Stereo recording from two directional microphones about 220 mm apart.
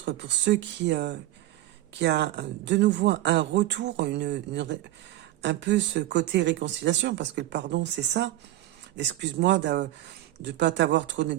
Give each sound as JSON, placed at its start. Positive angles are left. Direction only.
{"t": 0.0, "sound": "speech", "side_deg": -50}